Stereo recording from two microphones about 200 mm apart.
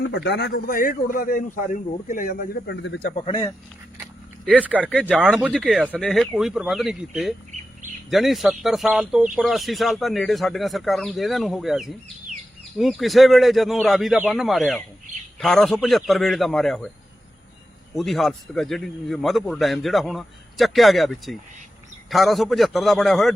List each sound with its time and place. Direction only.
0.1 s a man's voice: 60° left (ahead or behind)
3.2 s speech: 20° left (ahead or behind)
4.0 s a sound: 5° right (ahead or behind)
4.8 s a man's voice: 5° left (ahead or behind)
17.9 s a man's voice: centre (ahead or behind)